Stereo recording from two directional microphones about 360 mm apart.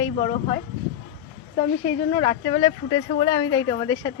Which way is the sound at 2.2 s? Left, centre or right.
Centre.